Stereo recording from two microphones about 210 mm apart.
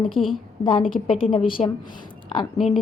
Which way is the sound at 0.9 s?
25° left (ahead or behind).